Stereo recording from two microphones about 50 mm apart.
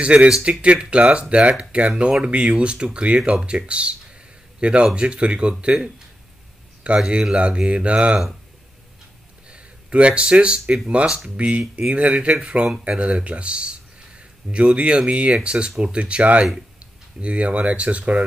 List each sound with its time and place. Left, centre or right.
0.0 s a man's voice: right
9.5 s speech: right